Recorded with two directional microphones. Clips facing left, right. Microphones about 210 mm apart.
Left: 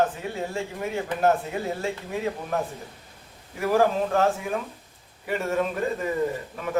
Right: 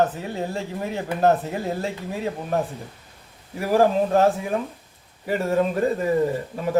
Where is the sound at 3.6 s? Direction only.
35° right (ahead or behind).